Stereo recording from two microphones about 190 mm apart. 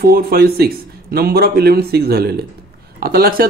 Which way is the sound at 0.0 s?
50° right (ahead or behind).